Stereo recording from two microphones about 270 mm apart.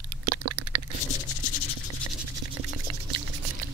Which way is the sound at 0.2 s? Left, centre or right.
Right.